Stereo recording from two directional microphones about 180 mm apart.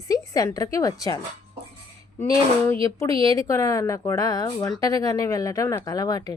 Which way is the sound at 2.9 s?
20° left (ahead or behind).